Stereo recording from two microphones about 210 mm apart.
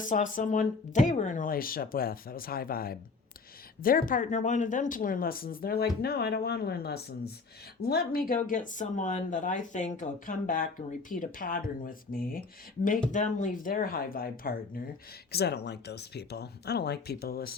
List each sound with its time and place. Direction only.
0.0 s speech: 40° left (ahead or behind)